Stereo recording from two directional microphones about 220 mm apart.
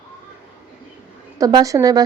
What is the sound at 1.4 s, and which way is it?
Speech, 15° right (ahead or behind).